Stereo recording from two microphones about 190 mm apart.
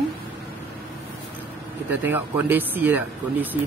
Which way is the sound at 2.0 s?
10° right (ahead or behind).